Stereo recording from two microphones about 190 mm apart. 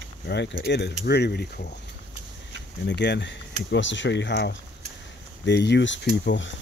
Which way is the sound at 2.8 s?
60° left (ahead or behind).